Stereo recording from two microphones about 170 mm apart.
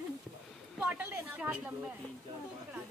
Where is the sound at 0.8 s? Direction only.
10° right (ahead or behind).